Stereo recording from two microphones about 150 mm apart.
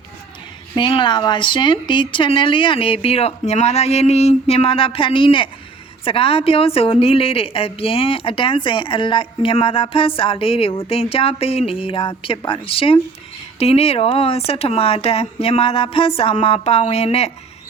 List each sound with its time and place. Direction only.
0.8 s a woman's voice: 35° left (ahead or behind)